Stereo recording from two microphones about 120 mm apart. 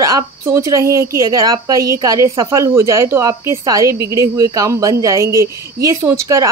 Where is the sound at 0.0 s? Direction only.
30° right (ahead or behind).